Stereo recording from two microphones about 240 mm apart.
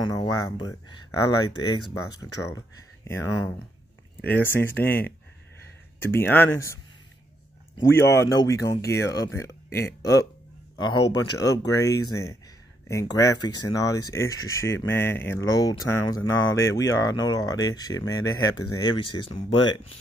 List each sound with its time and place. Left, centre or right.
0.0 s speech: centre
6.0 s speech: centre
8.1 s speech: centre